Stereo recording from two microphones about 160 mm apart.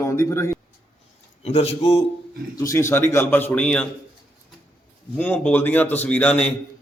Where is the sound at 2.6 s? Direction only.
20° left (ahead or behind).